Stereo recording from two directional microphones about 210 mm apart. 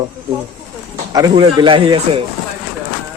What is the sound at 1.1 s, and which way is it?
Speech, 20° right (ahead or behind).